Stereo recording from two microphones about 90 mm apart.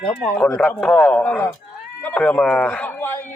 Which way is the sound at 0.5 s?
15° left (ahead or behind).